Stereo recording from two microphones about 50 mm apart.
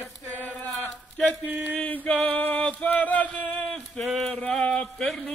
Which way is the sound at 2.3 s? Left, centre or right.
Left.